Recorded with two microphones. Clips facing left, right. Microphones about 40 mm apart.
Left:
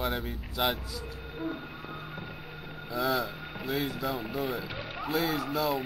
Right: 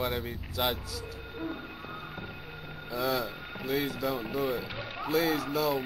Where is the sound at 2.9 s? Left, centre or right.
Centre.